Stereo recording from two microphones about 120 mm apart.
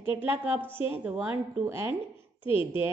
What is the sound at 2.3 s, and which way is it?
Speech, 45° left (ahead or behind).